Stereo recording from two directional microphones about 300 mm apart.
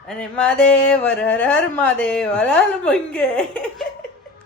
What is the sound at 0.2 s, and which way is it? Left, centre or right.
Speech, centre.